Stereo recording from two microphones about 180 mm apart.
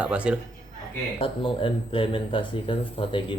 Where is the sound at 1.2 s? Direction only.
30° left (ahead or behind).